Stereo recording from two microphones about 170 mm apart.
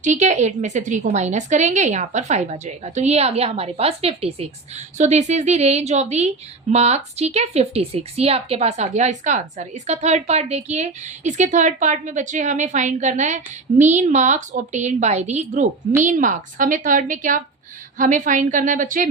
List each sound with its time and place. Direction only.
0.0 s a woman's voice: 45° right (ahead or behind)